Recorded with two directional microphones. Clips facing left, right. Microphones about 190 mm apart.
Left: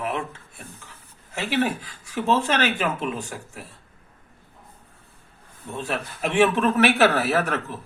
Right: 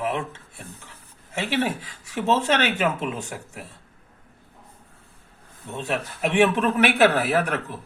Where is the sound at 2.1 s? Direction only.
20° right (ahead or behind).